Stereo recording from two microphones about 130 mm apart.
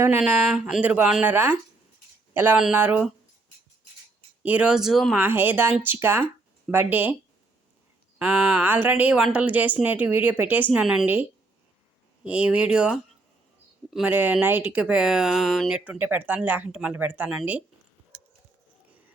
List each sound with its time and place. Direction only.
0.4 s a woman's voice: 5° right (ahead or behind)
4.4 s speech: 10° right (ahead or behind)
5.1 s a woman's voice: 15° right (ahead or behind)
8.2 s a woman's voice: 15° right (ahead or behind)
15.9 s a woman's voice: 15° right (ahead or behind)